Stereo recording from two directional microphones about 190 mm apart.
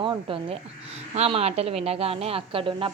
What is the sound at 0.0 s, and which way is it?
A woman's voice, 25° right (ahead or behind).